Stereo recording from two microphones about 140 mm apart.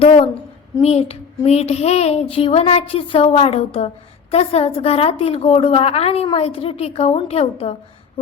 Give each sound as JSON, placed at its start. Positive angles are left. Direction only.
{"t": 0.8, "sound": "speech", "side_deg": 50}